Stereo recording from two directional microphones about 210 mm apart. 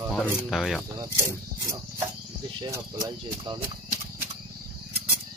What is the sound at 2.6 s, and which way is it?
Speech, 20° right (ahead or behind).